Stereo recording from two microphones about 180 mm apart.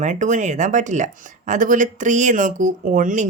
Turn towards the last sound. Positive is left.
turn(degrees=-45)  # may be behind; listen again after turning